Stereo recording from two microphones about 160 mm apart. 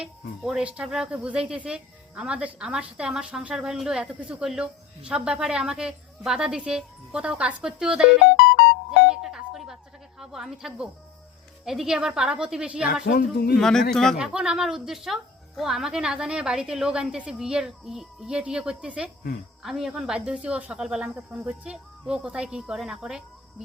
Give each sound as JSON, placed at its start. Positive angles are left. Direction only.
{"t": 0.0, "sound": "speech", "side_deg": -5}
{"t": 9.0, "sound": "doorbell", "side_deg": -5}
{"t": 10.2, "sound": "a woman's voice", "side_deg": -5}
{"t": 12.9, "sound": "a woman's voice", "side_deg": 60}
{"t": 13.6, "sound": "speech", "side_deg": 5}